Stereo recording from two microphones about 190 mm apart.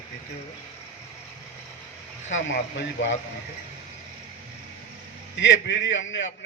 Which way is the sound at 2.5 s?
70° left (ahead or behind).